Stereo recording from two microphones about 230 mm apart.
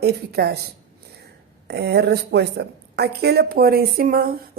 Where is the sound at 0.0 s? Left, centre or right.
Right.